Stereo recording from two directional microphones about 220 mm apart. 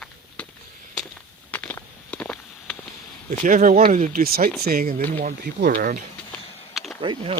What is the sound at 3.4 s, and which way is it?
Speech, 35° right (ahead or behind).